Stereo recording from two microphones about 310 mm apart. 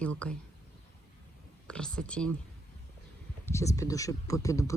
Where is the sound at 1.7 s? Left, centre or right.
Centre.